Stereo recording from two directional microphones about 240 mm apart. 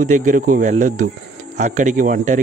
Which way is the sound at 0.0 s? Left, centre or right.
Right.